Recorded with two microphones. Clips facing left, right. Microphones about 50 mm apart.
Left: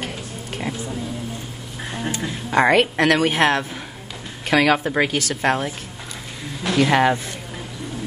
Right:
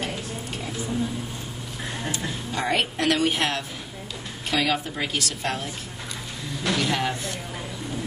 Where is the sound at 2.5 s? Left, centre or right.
Left.